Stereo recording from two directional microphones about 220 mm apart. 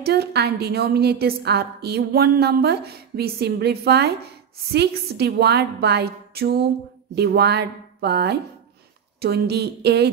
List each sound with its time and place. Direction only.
0.0 s a woman's voice: 45° right (ahead or behind)